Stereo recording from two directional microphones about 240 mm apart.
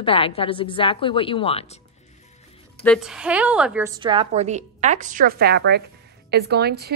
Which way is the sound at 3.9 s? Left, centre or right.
Right.